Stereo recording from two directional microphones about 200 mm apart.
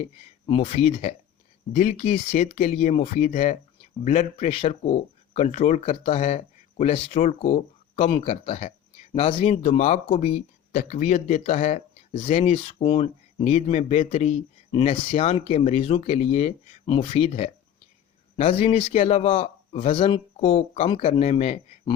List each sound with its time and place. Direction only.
0.4 s a man's voice: 30° left (ahead or behind)